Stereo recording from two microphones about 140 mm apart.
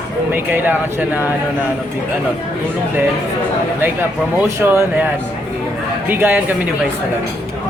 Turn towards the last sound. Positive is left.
turn(degrees=-15)  # may be behind; listen again after turning